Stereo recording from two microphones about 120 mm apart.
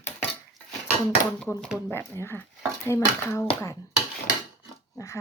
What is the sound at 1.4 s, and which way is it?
Speech, 10° left (ahead or behind).